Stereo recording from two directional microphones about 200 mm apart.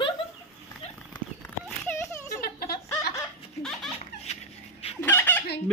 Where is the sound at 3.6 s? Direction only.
Centre (ahead or behind).